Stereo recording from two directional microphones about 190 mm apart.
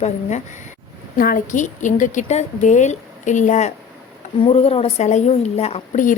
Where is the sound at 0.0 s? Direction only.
40° left (ahead or behind).